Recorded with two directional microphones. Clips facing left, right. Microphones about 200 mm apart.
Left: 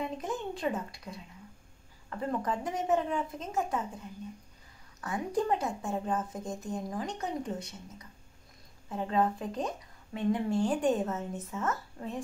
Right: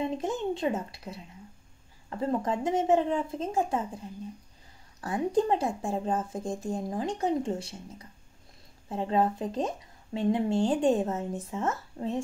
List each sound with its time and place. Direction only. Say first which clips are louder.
0.0 s speech: right 5 dB; 25° right (ahead or behind)
5.0 s speech: right 5 dB; 25° right (ahead or behind)